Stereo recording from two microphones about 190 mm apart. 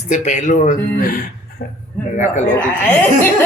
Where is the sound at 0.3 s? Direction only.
40° left (ahead or behind).